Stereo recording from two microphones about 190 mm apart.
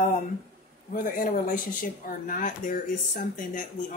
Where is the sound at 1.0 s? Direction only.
45° left (ahead or behind).